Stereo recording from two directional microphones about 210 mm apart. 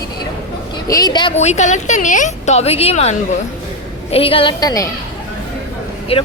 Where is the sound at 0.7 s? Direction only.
15° left (ahead or behind).